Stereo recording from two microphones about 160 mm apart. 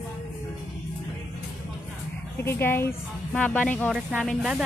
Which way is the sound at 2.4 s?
15° left (ahead or behind).